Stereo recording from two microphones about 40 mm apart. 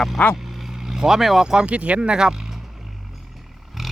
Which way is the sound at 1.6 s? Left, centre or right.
Right.